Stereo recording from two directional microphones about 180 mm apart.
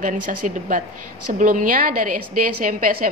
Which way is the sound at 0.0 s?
50° right (ahead or behind).